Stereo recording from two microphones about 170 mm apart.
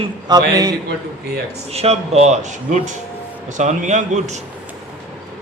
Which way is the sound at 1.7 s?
40° right (ahead or behind).